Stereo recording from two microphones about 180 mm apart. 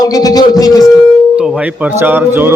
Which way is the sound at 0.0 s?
20° left (ahead or behind).